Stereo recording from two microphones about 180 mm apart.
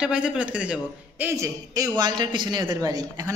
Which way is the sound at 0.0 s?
5° right (ahead or behind).